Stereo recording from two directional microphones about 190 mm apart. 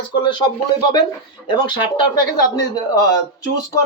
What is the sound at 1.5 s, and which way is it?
Speech, 25° left (ahead or behind).